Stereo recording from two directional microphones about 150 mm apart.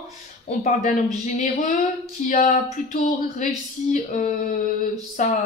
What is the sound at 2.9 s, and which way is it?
Speech, 55° left (ahead or behind).